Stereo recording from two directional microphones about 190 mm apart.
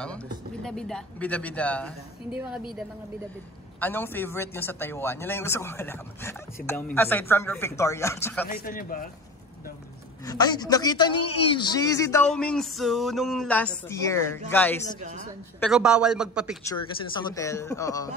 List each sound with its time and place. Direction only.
0.7 s speech: 5° left (ahead or behind)
3.8 s speech: 10° left (ahead or behind)
8.5 s speech: 50° left (ahead or behind)
10.2 s a man's voice: 20° left (ahead or behind)
12.3 s music: 5° left (ahead or behind)
13.8 s speech: 15° left (ahead or behind)
15.0 s a woman's voice: 40° right (ahead or behind)
15.7 s music: 5° right (ahead or behind)
16.6 s speech: 20° left (ahead or behind)